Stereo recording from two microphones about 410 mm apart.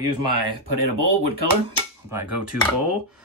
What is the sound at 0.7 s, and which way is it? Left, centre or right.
Speech, right.